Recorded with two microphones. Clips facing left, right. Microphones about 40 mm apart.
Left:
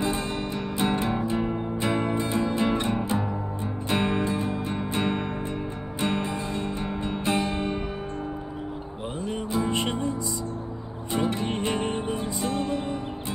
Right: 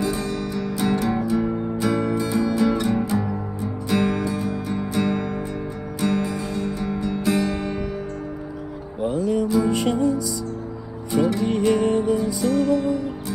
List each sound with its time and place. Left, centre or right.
0.0 s music: left
9.0 s music: left